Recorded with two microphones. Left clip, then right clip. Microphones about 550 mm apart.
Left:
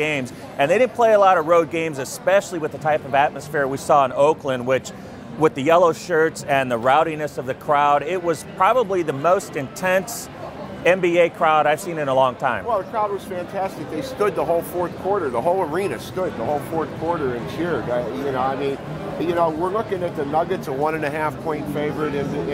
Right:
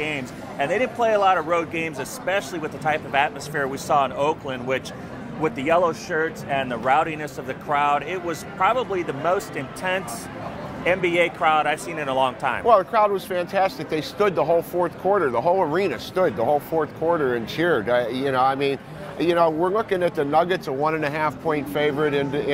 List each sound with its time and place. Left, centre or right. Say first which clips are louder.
0.0 s a man's voice: left 4 dB; left
12.6 s speech: right 5 dB; right
17.6 s speech: right 3 dB; right